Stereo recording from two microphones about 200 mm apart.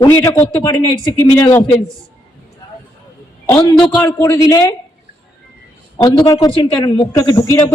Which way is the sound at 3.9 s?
10° left (ahead or behind).